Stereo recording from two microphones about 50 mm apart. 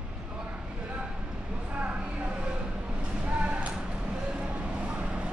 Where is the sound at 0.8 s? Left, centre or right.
Right.